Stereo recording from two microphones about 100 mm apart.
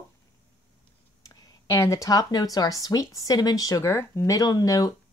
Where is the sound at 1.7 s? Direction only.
30° left (ahead or behind).